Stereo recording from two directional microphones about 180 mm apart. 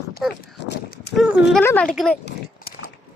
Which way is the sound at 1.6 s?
10° left (ahead or behind).